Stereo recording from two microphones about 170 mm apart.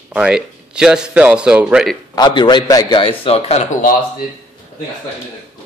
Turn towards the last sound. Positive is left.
turn(degrees=45)  # may be behind; listen again after turning